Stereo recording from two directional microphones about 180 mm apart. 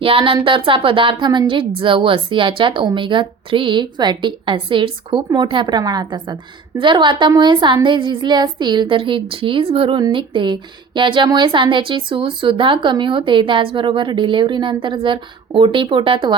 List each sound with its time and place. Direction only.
0.0 s a woman's voice: 30° right (ahead or behind)